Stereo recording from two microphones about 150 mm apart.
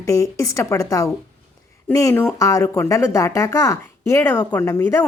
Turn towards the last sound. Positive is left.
turn(degrees=20)  # may be behind; listen again after turning